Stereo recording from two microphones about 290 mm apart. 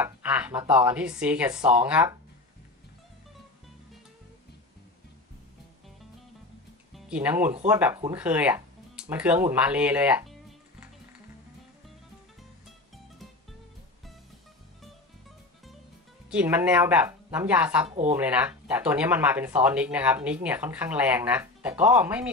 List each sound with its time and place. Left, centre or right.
0.0 s speech: centre
7.1 s speech: centre
16.3 s speech: centre
17.8 s speech: right
18.1 s speech: centre